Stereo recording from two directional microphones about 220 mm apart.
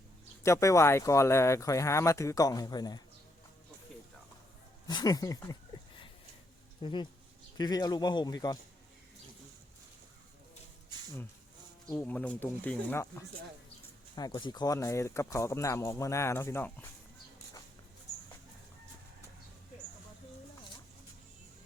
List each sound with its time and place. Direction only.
0.4 s speech: 15° left (ahead or behind)
4.9 s speech: 20° left (ahead or behind)
6.8 s speech: 20° left (ahead or behind)
11.9 s speech: 5° left (ahead or behind)